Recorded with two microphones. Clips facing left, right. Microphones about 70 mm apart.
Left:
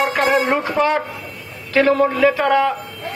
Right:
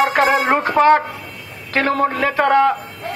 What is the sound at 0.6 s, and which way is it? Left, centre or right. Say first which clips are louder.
A man's voice: right 5 dB; right.